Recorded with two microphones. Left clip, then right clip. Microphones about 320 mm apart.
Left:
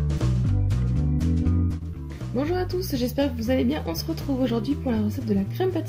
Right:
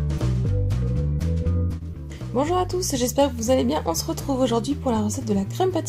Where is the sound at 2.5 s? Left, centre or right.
Right.